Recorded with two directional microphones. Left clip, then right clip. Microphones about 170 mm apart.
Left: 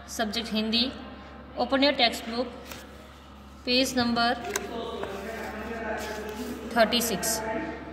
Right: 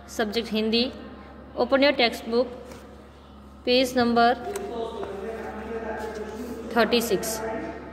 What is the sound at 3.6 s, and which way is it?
Speech, 45° right (ahead or behind).